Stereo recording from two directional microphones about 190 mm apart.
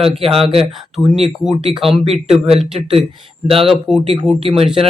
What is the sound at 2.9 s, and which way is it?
Speech, 30° right (ahead or behind).